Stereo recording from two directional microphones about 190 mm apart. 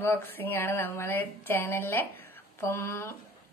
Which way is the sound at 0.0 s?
10° left (ahead or behind).